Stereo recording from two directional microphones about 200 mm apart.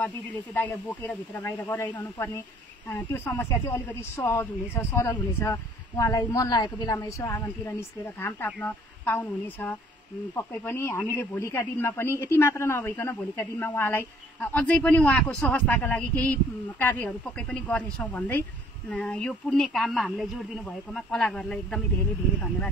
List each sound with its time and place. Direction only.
0.6 s speech: 10° left (ahead or behind)